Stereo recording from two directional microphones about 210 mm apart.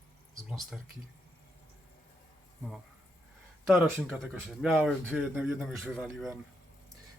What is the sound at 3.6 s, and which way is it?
Speech, centre (ahead or behind).